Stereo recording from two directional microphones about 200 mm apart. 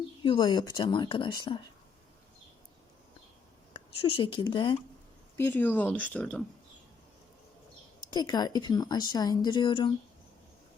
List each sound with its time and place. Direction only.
0.2 s a woman's voice: 25° left (ahead or behind)
3.7 s speech: 25° left (ahead or behind)
5.4 s speech: 10° left (ahead or behind)
8.1 s a woman's voice: 20° left (ahead or behind)